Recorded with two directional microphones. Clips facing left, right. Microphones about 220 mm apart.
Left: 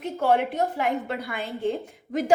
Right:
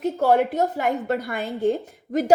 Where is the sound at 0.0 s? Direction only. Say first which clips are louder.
Right 4 dB; 45° right (ahead or behind).